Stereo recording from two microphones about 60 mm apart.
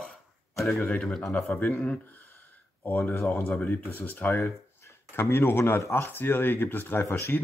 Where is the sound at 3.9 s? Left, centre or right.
Left.